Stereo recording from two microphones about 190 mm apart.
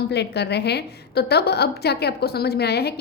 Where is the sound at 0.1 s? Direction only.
60° left (ahead or behind).